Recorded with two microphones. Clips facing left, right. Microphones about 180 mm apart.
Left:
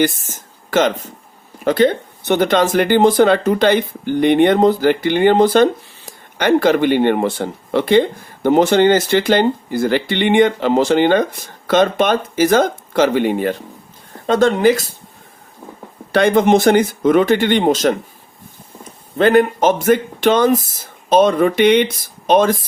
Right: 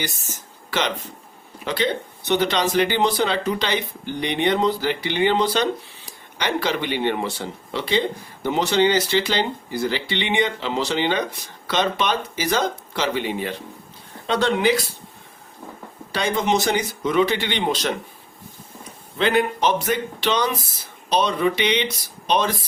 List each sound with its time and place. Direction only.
0.0 s speech: 50° left (ahead or behind)
16.1 s speech: 55° left (ahead or behind)
19.1 s speech: 45° left (ahead or behind)